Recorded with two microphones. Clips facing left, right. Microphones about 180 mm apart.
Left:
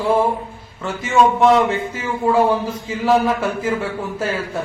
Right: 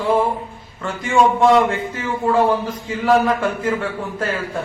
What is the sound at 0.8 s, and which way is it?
A man's voice, 5° left (ahead or behind).